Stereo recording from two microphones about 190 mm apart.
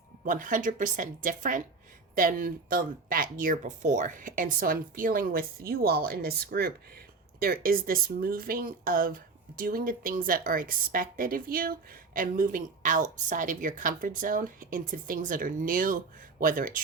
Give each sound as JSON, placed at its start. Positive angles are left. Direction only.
{"t": 0.3, "sound": "speech", "side_deg": -45}